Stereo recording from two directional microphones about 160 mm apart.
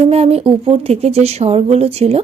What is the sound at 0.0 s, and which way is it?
Speech, 40° right (ahead or behind).